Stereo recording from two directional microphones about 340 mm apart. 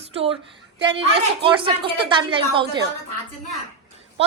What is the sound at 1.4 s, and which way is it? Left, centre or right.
A woman's voice, centre.